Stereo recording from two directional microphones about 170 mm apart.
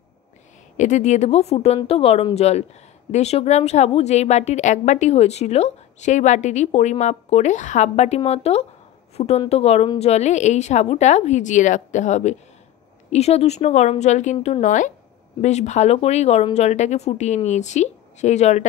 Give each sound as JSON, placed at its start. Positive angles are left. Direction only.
{"t": 0.7, "sound": "a woman's voice", "side_deg": 45}